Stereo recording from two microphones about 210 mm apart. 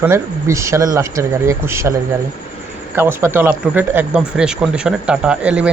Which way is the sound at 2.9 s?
10° right (ahead or behind).